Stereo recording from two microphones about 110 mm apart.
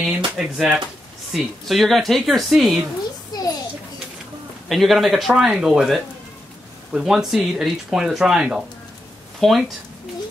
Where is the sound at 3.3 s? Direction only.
35° left (ahead or behind).